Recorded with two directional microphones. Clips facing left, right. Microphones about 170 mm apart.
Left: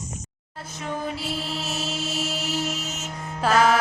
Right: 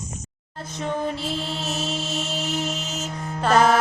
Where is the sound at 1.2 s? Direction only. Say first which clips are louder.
Right 2 dB; 5° left (ahead or behind).